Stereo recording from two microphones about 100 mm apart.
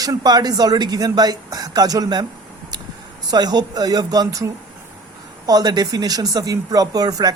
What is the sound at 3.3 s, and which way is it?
Speech, 45° right (ahead or behind).